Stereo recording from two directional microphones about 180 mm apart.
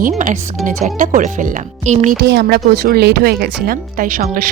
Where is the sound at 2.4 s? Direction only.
55° right (ahead or behind).